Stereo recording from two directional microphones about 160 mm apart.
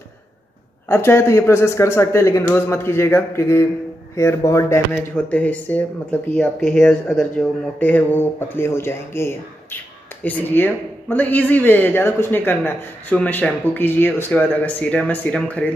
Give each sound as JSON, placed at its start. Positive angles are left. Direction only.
{"t": 0.8, "sound": "speech", "side_deg": 15}